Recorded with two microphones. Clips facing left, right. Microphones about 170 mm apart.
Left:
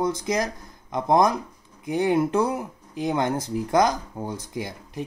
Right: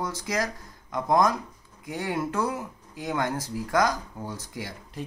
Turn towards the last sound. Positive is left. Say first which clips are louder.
# left 5 dB
turn(degrees=20)  # may be behind; listen again after turning